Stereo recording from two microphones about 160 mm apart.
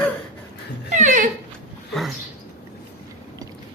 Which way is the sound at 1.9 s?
Centre (ahead or behind).